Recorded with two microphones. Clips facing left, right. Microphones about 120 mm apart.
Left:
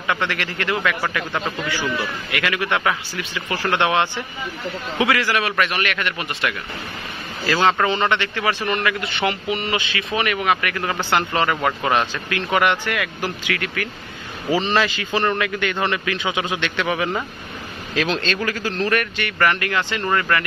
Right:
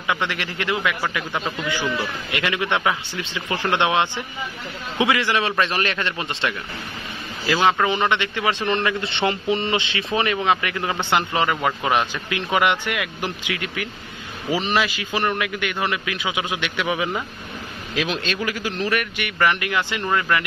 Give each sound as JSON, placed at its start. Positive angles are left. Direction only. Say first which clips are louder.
{"t": 0.0, "sound": "a man's voice", "louder": "left 1 dB", "side_deg": -15}
{"t": 7.4, "sound": "a man's voice", "louder": "left 1 dB", "side_deg": -15}